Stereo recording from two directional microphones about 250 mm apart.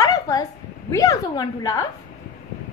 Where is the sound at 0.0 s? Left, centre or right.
Centre.